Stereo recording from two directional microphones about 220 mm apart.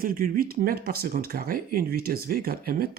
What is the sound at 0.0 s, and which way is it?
Speech, 40° right (ahead or behind).